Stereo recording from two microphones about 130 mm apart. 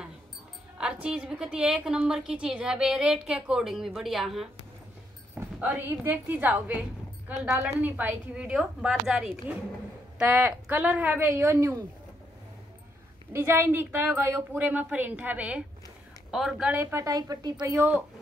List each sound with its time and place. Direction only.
0.7 s a woman's voice: 5° right (ahead or behind)
5.6 s a woman's voice: 15° right (ahead or behind)
13.3 s a woman's voice: 20° right (ahead or behind); by 16.7 s 5° right (ahead or behind)
16.7 s a woman's voice: 20° right (ahead or behind)
17.7 s a woman's voice: 10° right (ahead or behind)